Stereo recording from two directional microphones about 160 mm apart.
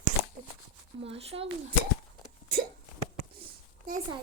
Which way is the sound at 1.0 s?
35° right (ahead or behind).